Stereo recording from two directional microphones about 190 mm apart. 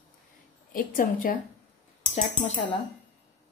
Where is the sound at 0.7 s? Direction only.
45° left (ahead or behind).